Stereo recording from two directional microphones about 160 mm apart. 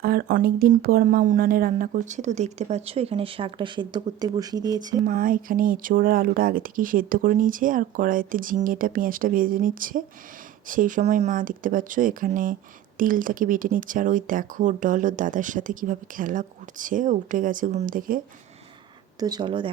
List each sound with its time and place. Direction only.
0.0 s speech: 75° right (ahead or behind); by 5.0 s 25° right (ahead or behind)
5.0 s speech: 60° right (ahead or behind)
19.2 s speech: 25° right (ahead or behind)